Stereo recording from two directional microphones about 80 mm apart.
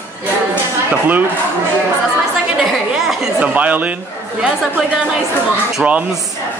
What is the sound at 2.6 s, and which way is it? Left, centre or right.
Speech, centre.